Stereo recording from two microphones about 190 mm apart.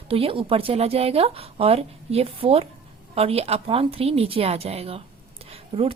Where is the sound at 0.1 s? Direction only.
30° right (ahead or behind).